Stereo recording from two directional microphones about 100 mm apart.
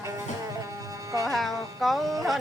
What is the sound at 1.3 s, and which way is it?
Music, centre (ahead or behind).